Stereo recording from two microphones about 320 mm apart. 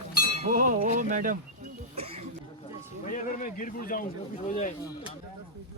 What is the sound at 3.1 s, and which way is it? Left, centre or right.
A man's voice, left.